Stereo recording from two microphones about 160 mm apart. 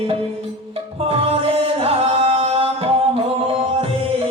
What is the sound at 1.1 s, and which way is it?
Music, 35° right (ahead or behind).